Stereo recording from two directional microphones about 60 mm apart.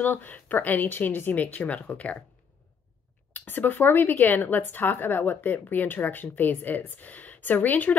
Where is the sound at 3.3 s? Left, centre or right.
Left.